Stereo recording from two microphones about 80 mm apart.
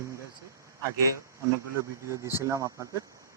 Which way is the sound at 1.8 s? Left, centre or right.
Right.